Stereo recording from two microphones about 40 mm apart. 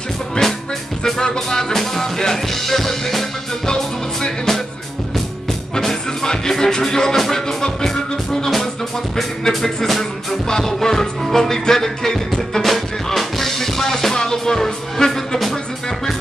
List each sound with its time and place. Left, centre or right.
0.4 s music: left; by 3.3 s centre
3.6 s music: centre
5.8 s music: centre